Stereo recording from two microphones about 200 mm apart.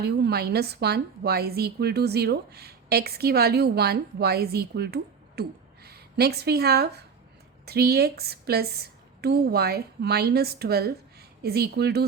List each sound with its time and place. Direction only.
0.0 s a woman's voice: 50° right (ahead or behind)